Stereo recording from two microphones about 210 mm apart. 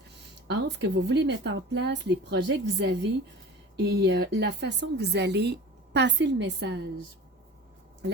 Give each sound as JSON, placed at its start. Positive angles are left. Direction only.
{"t": 0.4, "sound": "a woman's voice", "side_deg": -55}